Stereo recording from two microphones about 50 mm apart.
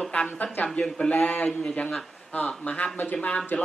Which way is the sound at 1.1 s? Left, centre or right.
Left.